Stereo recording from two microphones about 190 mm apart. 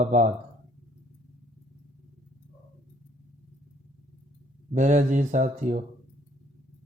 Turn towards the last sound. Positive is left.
turn(degrees=-40)  # may be behind; listen again after turning